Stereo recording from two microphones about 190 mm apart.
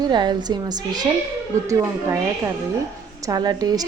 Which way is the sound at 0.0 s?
25° right (ahead or behind).